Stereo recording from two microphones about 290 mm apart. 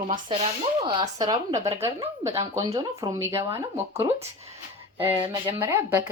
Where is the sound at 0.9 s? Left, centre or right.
Centre.